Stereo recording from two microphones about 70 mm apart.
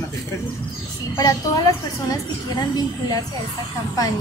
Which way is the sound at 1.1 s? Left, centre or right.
Left.